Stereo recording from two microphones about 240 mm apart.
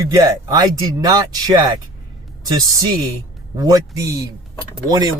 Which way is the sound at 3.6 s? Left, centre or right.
Centre.